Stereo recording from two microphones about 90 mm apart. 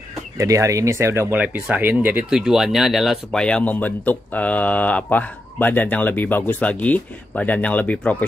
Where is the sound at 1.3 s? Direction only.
15° right (ahead or behind).